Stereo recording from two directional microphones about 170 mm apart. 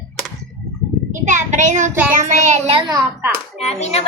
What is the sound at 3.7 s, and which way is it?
Speech, 40° left (ahead or behind).